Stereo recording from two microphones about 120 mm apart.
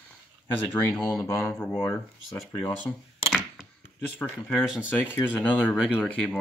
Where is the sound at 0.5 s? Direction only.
15° left (ahead or behind).